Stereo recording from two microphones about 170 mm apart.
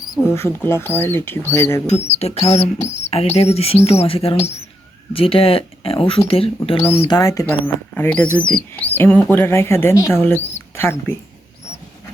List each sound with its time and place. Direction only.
0.3 s speech: 15° left (ahead or behind)
2.0 s speech: 35° left (ahead or behind)
7.2 s speech: 20° left (ahead or behind)